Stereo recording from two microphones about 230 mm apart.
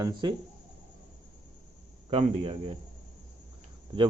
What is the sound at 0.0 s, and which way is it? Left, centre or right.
Speech, centre.